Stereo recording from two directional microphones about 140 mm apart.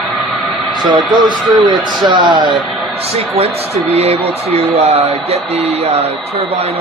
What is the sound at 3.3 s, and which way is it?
Speech, 45° right (ahead or behind).